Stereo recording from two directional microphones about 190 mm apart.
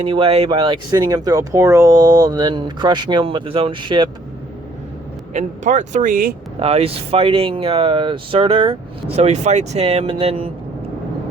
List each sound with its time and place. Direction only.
0.0 s speech: 30° right (ahead or behind)
5.3 s speech: 40° right (ahead or behind)
6.6 s speech: 30° right (ahead or behind)